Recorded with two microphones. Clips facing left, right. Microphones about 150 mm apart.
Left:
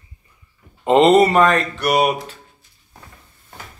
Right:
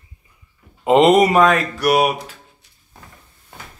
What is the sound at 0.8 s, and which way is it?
Speech, 5° right (ahead or behind).